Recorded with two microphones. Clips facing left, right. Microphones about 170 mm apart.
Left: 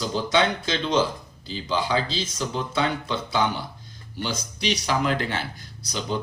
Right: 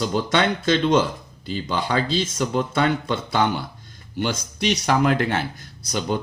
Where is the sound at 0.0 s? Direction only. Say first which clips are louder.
Right 2 dB; 55° right (ahead or behind).